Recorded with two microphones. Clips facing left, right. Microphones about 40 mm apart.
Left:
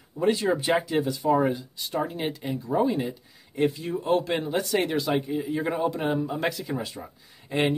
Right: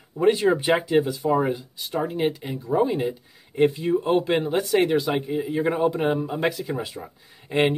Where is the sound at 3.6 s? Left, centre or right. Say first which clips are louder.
Right 5 dB; right.